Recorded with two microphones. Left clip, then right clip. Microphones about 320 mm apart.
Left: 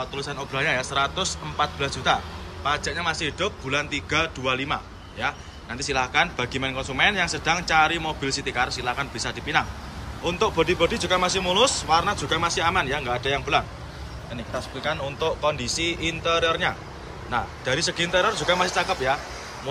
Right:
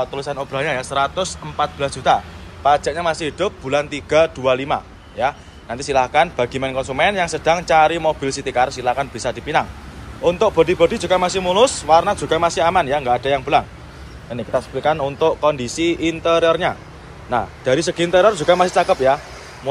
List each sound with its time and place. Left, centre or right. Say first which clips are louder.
0.0 s a man's voice: right 7 dB; centre